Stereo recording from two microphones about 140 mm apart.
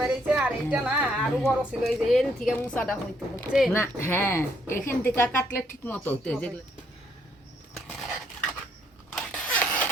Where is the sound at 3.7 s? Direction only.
20° left (ahead or behind).